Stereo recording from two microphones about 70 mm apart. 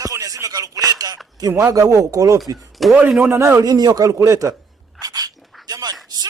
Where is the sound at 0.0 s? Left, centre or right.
Right.